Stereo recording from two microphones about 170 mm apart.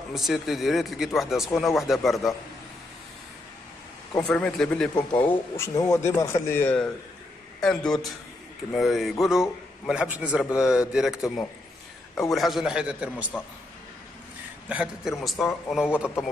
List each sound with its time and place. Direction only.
0.1 s speech: centre (ahead or behind)
4.1 s a man's voice: 5° left (ahead or behind)
14.7 s speech: 5° right (ahead or behind)